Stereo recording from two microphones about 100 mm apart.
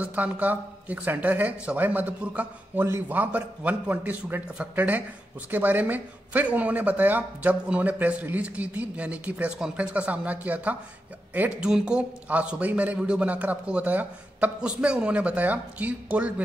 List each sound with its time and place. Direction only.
0.0 s speech: 15° right (ahead or behind)